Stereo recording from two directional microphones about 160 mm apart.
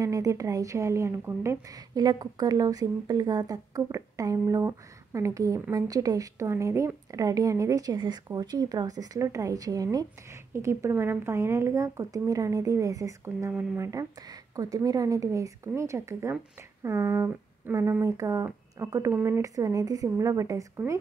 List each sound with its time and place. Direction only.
0.0 s a woman's voice: 20° right (ahead or behind)